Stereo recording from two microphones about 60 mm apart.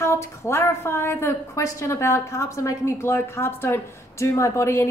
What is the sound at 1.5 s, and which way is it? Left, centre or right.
A woman's voice, left.